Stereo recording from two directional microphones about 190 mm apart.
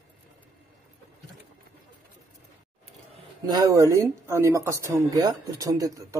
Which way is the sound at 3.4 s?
20° right (ahead or behind).